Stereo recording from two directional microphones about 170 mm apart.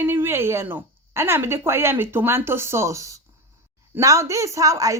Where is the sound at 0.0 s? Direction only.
15° right (ahead or behind).